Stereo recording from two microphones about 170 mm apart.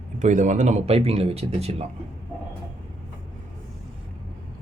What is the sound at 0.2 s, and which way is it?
Speech, 45° right (ahead or behind).